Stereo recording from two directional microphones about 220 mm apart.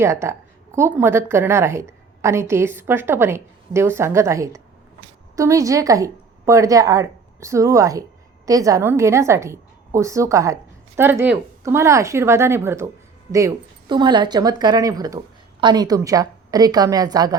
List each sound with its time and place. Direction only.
0.0 s a woman's voice: 10° right (ahead or behind)